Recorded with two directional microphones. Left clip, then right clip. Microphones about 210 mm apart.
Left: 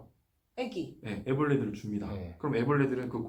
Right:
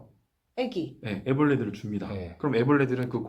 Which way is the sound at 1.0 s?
45° right (ahead or behind).